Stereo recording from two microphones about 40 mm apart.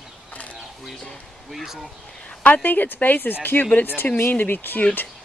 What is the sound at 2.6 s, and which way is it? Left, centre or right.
A woman's voice, left.